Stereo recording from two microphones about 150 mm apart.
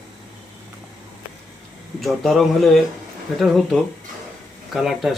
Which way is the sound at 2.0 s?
Centre (ahead or behind).